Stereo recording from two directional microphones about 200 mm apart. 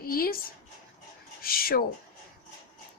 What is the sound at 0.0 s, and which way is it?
Speech, 45° left (ahead or behind).